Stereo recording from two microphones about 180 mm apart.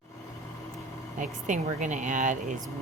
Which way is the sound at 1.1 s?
45° right (ahead or behind).